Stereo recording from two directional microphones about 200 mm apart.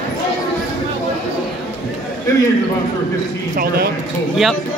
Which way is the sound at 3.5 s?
50° right (ahead or behind).